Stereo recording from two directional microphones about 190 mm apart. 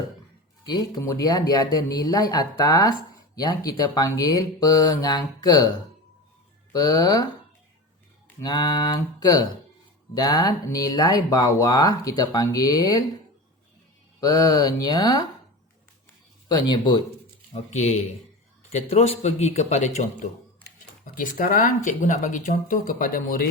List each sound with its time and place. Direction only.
0.6 s speech: 20° left (ahead or behind)
6.7 s speech: 20° left (ahead or behind)
8.4 s speech: 20° left (ahead or behind)
14.2 s speech: 20° left (ahead or behind)
16.5 s speech: 25° left (ahead or behind)
17.5 s a man's voice: 35° left (ahead or behind)